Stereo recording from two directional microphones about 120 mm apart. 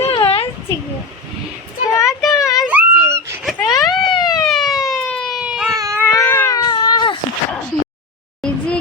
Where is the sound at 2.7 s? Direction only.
15° right (ahead or behind).